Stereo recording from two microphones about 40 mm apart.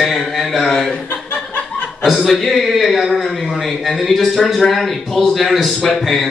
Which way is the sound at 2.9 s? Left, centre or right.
Centre.